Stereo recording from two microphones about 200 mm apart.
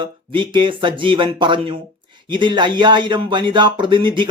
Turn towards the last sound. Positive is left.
turn(degrees=-25)  # may be behind; listen again after turning